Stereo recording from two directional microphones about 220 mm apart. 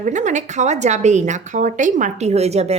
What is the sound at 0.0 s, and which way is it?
A woman's voice, 35° right (ahead or behind).